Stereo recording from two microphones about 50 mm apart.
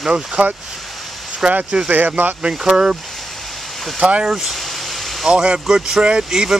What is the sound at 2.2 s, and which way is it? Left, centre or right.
Speech, right.